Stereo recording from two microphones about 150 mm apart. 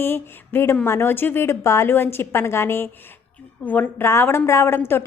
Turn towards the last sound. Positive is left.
turn(degrees=15)  # may be behind; listen again after turning